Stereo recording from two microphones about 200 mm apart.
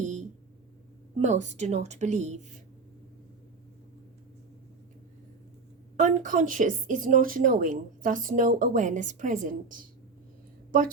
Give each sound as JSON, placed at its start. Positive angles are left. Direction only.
{"t": 0.0, "sound": "a sound", "side_deg": -35}
{"t": 1.2, "sound": "a woman's voice", "side_deg": -35}
{"t": 6.0, "sound": "a woman's voice", "side_deg": -40}